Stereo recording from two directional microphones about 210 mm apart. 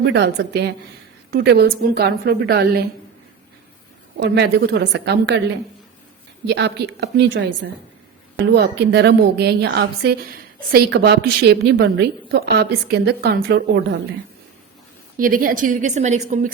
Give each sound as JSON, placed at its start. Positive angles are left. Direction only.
{"t": 0.0, "sound": "a woman's voice", "side_deg": -55}
{"t": 4.2, "sound": "a woman's voice", "side_deg": -50}
{"t": 6.5, "sound": "a woman's voice", "side_deg": -55}
{"t": 8.5, "sound": "a woman's voice", "side_deg": -55}
{"t": 15.2, "sound": "a woman's voice", "side_deg": -40}